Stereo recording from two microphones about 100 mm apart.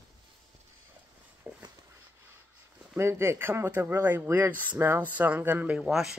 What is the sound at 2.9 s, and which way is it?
Speech, 25° right (ahead or behind).